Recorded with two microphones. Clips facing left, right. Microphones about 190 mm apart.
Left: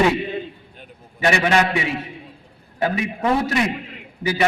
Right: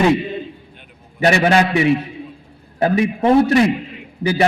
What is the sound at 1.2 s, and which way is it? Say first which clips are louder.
A man's voice: right 4 dB; 35° right (ahead or behind).